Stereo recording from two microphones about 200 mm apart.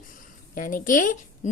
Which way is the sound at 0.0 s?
40° left (ahead or behind).